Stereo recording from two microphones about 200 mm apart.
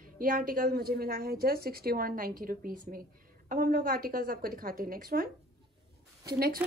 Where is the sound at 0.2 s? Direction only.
45° right (ahead or behind).